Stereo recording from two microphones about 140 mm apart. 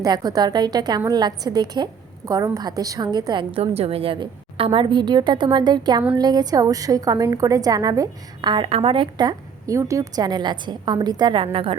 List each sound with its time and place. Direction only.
0.0 s a woman's voice: 30° right (ahead or behind)
3.5 s a woman's voice: 45° right (ahead or behind)